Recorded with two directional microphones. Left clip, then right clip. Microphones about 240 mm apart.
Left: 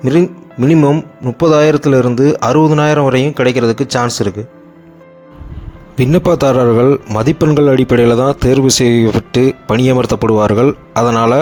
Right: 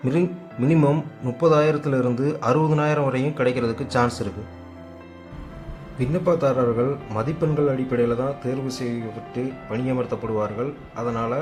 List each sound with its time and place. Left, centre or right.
0.0 s speech: left
0.8 s speech: centre
6.0 s speech: left